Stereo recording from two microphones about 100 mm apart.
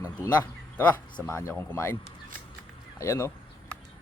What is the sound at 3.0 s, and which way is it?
Speech, 30° left (ahead or behind).